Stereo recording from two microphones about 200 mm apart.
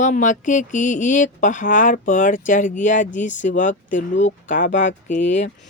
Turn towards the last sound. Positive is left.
turn(degrees=35)  # may be behind; listen again after turning